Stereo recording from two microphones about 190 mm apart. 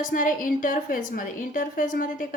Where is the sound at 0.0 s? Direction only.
45° left (ahead or behind).